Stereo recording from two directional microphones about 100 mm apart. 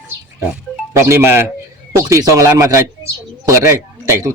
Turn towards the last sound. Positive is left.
turn(degrees=-30)  # may be behind; listen again after turning